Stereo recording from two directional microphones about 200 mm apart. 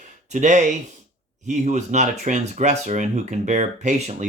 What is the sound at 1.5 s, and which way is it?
Speech, 35° right (ahead or behind).